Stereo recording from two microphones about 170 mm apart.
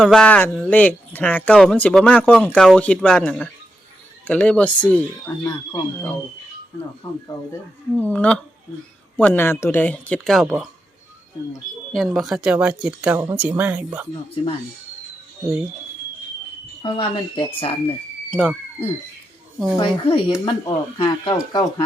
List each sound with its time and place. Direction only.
0.0 s speech: 5° left (ahead or behind)
7.9 s speech: 10° left (ahead or behind)
11.9 s speech: centre (ahead or behind)
16.8 s speech: 30° left (ahead or behind)
18.3 s speech: 5° left (ahead or behind)
19.7 s speech: 30° left (ahead or behind)